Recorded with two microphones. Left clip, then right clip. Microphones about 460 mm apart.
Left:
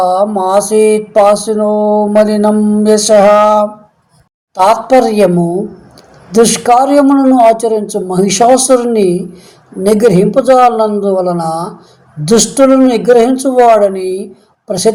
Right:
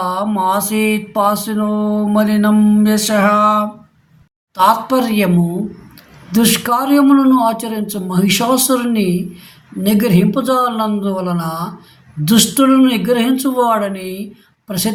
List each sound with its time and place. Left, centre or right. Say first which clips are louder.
0.0 s music: left 7 dB; right
6.3 s music: left 8 dB; right